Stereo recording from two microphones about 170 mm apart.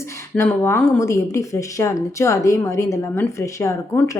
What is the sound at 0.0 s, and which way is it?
Speech, 15° left (ahead or behind).